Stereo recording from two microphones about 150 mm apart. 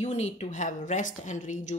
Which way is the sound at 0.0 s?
50° left (ahead or behind).